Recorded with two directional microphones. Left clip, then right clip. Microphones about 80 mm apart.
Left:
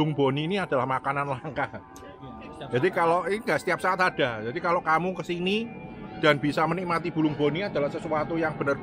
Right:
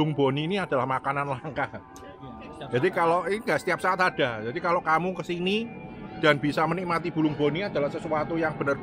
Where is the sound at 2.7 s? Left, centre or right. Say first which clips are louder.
Even; centre.